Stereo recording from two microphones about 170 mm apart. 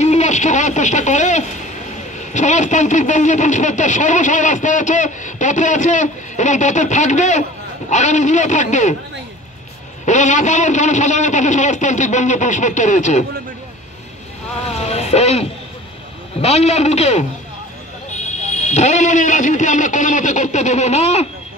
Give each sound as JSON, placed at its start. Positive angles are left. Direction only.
{"t": 0.0, "sound": "speech", "side_deg": 40}
{"t": 10.0, "sound": "speech", "side_deg": 45}
{"t": 14.7, "sound": "vehicle", "side_deg": 40}
{"t": 16.3, "sound": "speech", "side_deg": 40}
{"t": 18.6, "sound": "speech", "side_deg": 40}